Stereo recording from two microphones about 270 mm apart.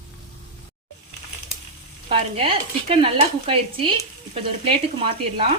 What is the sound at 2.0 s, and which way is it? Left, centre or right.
A woman's voice, right.